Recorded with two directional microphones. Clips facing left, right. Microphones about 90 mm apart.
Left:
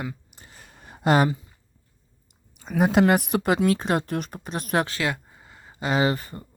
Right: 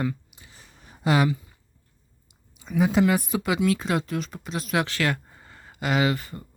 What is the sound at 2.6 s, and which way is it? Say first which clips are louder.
Speech: left 2 dB; 55° left (ahead or behind).